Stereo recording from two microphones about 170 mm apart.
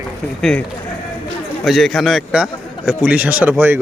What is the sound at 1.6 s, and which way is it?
A man's voice, centre (ahead or behind).